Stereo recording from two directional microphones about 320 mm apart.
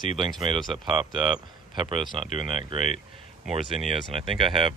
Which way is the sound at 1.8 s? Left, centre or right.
Centre.